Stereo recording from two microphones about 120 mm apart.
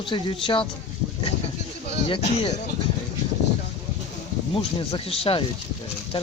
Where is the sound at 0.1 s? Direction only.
45° left (ahead or behind).